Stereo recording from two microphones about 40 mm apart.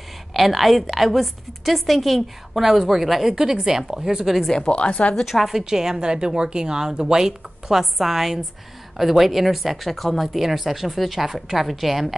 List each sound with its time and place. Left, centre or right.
0.3 s a woman's voice: centre
4.6 s speech: left
5.2 s a woman's voice: centre
5.6 s a woman's voice: centre